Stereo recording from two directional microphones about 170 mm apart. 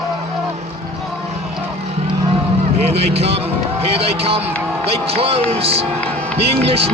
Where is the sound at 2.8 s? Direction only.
35° right (ahead or behind).